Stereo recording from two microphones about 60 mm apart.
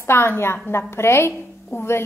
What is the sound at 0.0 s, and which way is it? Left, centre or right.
A woman's voice, left.